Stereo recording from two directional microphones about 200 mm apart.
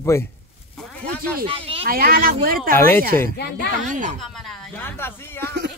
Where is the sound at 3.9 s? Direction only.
40° right (ahead or behind).